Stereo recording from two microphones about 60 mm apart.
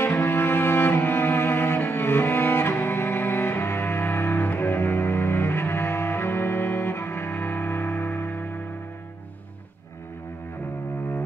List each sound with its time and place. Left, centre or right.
0.0 s cello: left